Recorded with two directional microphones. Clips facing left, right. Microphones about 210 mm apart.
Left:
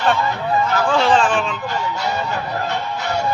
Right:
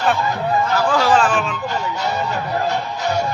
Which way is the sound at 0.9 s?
5° right (ahead or behind).